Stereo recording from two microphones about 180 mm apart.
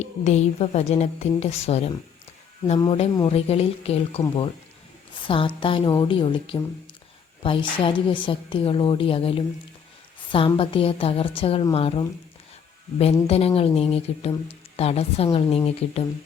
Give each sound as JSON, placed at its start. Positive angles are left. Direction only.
{"t": 0.0, "sound": "a woman's voice", "side_deg": 40}
{"t": 5.2, "sound": "a woman's voice", "side_deg": 30}
{"t": 13.2, "sound": "a woman's voice", "side_deg": 35}